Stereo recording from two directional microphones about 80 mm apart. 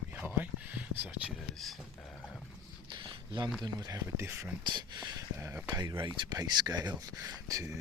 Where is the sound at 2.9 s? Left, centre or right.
Right.